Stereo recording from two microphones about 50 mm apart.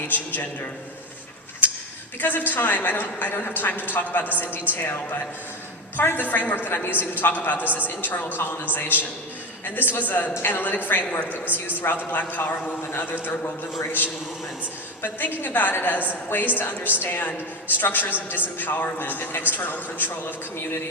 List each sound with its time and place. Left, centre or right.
0.1 s a man's voice: left
2.2 s a man's voice: left
6.0 s a man's voice: left